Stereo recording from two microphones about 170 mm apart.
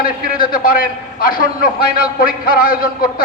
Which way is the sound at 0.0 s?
55° left (ahead or behind).